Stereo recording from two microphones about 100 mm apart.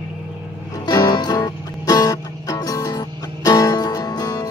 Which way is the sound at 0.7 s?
40° left (ahead or behind).